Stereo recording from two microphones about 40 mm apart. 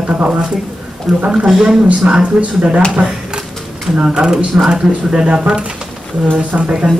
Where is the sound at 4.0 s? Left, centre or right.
Right.